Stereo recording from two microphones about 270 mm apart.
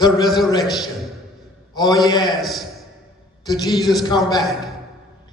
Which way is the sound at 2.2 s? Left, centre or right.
Centre.